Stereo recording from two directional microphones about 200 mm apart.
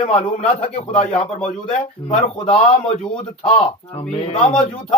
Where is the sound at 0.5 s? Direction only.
35° left (ahead or behind).